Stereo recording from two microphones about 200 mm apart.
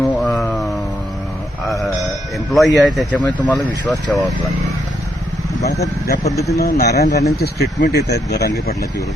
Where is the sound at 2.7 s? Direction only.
Centre (ahead or behind).